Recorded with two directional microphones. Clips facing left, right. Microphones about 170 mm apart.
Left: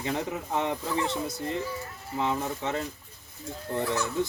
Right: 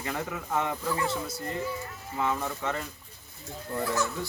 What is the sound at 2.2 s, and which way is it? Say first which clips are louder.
Speech: left 1 dB; 20° left (ahead or behind).